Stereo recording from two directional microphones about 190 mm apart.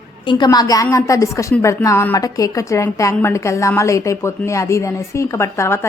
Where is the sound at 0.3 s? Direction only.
20° left (ahead or behind).